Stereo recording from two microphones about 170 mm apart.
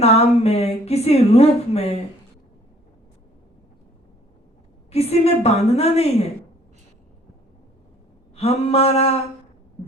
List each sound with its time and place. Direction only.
0.0 s a woman's voice: 40° left (ahead or behind)
4.9 s a woman's voice: 40° left (ahead or behind)
8.4 s a woman's voice: 35° left (ahead or behind)